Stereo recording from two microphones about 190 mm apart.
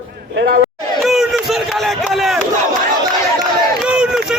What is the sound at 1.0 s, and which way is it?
Chatter, centre (ahead or behind).